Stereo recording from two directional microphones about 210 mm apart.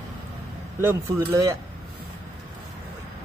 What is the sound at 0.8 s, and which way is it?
Speech, 10° right (ahead or behind).